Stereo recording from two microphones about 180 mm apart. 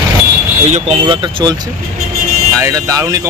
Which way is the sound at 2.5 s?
15° right (ahead or behind).